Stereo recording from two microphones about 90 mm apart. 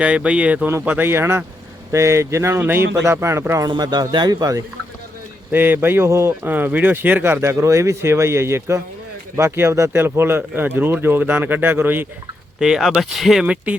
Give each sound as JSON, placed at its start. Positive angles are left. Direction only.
{"t": 0.0, "sound": "speech", "side_deg": -10}
{"t": 3.7, "sound": "a man's voice", "side_deg": -50}
{"t": 5.5, "sound": "speech", "side_deg": -20}
{"t": 12.5, "sound": "speech", "side_deg": -5}
{"t": 13.4, "sound": "speech", "side_deg": -15}